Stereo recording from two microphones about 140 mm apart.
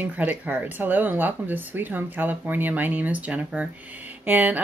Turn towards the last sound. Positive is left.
turn(degrees=-10)  # may be behind; listen again after turning